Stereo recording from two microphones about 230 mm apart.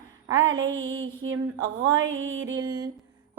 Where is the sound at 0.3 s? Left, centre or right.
Right.